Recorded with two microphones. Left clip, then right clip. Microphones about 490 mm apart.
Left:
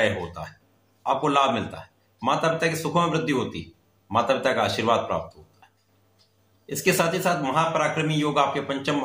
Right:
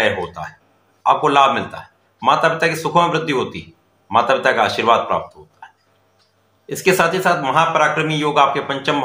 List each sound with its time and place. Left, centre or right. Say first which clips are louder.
0.0 s a man's voice: right 6 dB; left
5.6 s a sound: right 16 dB; left
6.6 s a man's voice: right 7 dB; left